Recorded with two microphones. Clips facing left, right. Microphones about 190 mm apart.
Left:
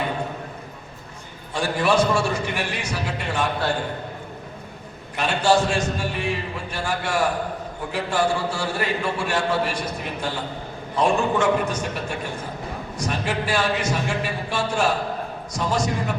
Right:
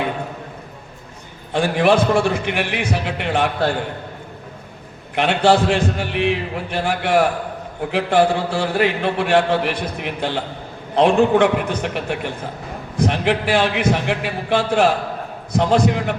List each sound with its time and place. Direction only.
1.5 s a man's voice: 60° right (ahead or behind)
5.1 s a man's voice: 65° right (ahead or behind)